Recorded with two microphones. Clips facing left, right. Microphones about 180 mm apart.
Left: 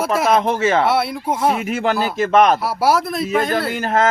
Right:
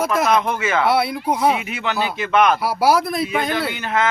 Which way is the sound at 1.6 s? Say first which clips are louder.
Left 4 dB; 45° left (ahead or behind).